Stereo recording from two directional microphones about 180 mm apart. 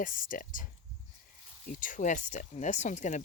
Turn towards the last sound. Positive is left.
turn(degrees=40)  # may be behind; listen again after turning